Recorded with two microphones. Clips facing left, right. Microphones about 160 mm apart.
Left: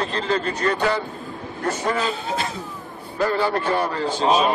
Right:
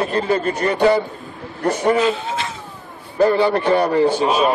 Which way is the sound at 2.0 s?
40° left (ahead or behind).